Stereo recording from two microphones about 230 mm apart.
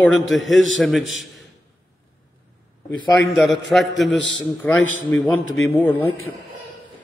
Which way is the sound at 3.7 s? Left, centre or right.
Centre.